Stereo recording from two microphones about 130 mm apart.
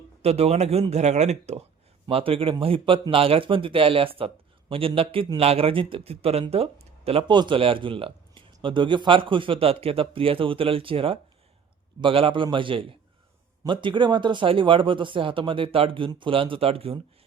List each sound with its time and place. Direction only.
0.2 s speech: 55° right (ahead or behind)
2.0 s speech: 45° right (ahead or behind)